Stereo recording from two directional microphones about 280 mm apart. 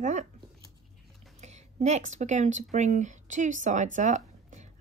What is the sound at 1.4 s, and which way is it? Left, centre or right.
Speech, right.